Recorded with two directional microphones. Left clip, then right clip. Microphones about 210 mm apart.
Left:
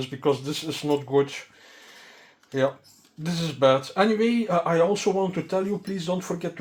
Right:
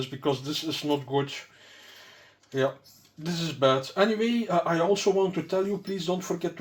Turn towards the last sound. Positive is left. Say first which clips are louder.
# left 1 dB
turn(degrees=30)  # may be behind; listen again after turning